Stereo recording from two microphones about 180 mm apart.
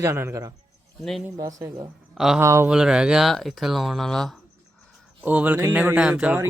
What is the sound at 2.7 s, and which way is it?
Speech, 5° right (ahead or behind).